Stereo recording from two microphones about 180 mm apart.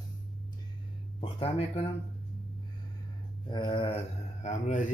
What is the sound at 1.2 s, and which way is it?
Speech, 35° left (ahead or behind).